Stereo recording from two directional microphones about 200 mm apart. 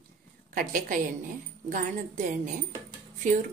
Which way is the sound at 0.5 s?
45° right (ahead or behind).